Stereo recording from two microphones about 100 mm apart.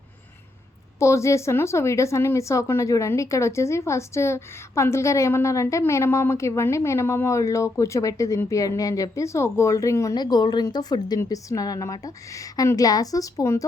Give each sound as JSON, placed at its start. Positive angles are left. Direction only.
{"t": 0.9, "sound": "speech", "side_deg": 30}
{"t": 10.2, "sound": "a woman's voice", "side_deg": 45}